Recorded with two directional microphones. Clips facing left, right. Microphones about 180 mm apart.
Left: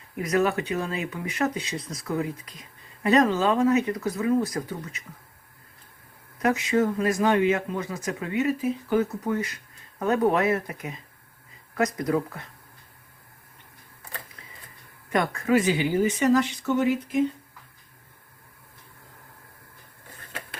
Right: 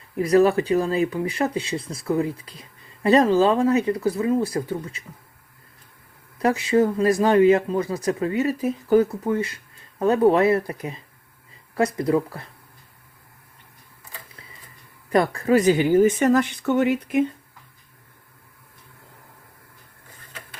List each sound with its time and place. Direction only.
0.2 s speech: 35° right (ahead or behind)
6.4 s speech: 30° right (ahead or behind)
15.1 s speech: 35° right (ahead or behind); by 17.2 s 65° right (ahead or behind)